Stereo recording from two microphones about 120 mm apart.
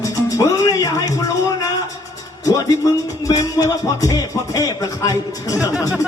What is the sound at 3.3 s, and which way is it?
Music, 30° left (ahead or behind).